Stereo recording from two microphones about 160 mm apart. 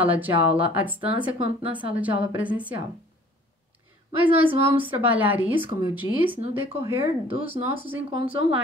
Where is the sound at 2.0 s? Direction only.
10° right (ahead or behind).